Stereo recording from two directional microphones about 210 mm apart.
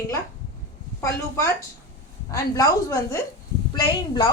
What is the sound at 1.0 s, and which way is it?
A woman's voice, 15° left (ahead or behind).